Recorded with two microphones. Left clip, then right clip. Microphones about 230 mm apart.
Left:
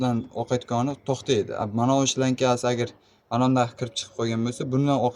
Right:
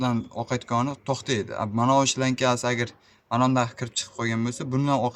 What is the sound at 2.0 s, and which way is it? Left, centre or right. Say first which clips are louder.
Speech: even; right.